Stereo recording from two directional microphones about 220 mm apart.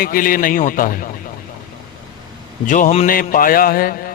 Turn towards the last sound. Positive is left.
turn(degrees=40)  # may be behind; listen again after turning